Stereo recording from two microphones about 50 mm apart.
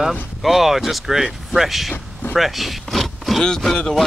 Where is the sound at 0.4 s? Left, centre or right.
Centre.